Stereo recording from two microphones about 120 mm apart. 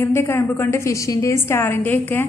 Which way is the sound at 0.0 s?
20° left (ahead or behind).